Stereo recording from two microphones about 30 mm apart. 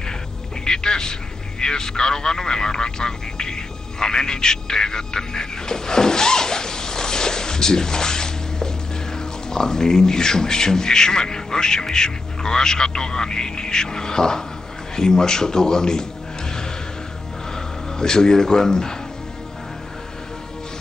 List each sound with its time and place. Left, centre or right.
0.7 s a man's voice: left
17.9 s a man's voice: left